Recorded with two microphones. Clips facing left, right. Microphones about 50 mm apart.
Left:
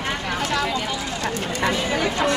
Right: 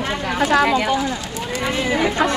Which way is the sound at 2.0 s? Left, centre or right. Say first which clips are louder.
Right 5 dB; right.